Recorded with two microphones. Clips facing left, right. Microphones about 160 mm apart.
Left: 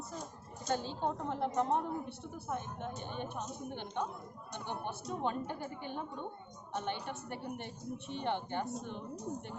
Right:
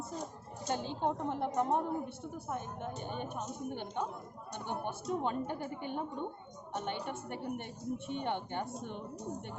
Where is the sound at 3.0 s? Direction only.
50° right (ahead or behind).